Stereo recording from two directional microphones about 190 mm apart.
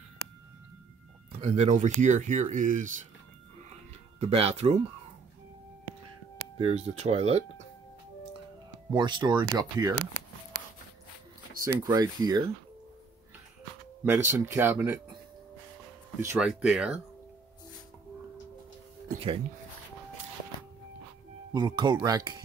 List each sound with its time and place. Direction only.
1.4 s speech: 35° right (ahead or behind)
4.2 s speech: 30° right (ahead or behind)
6.6 s speech: 35° right (ahead or behind)
8.9 s speech: 25° right (ahead or behind)
11.6 s speech: 20° right (ahead or behind)
14.0 s speech: 10° right (ahead or behind)
16.2 s speech: 10° right (ahead or behind)
19.0 s speech: 30° right (ahead or behind)
21.5 s speech: 25° right (ahead or behind)